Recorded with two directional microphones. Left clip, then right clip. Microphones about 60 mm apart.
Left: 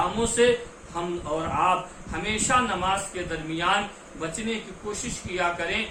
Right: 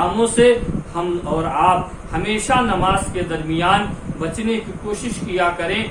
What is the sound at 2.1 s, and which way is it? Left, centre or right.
A man's voice, left.